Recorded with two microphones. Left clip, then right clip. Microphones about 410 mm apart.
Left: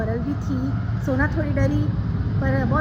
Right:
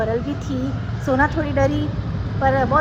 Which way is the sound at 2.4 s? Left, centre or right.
Right.